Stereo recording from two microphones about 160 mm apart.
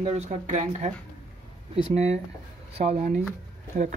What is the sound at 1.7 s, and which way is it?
Speech, 40° right (ahead or behind).